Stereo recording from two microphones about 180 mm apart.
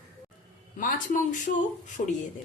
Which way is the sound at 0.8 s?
50° left (ahead or behind).